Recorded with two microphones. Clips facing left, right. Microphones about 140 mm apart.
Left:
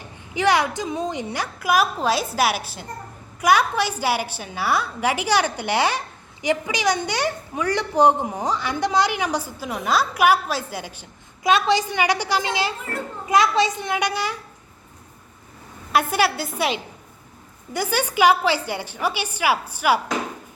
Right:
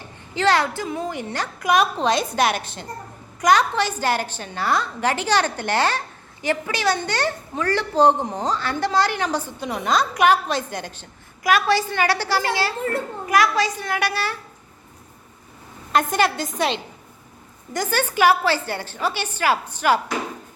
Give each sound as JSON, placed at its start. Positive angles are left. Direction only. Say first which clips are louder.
{"t": 0.3, "sound": "a woman's voice", "louder": "even", "side_deg": 15}
{"t": 11.4, "sound": "a woman's voice", "louder": "even", "side_deg": 20}
{"t": 15.9, "sound": "a woman's voice", "louder": "even", "side_deg": 10}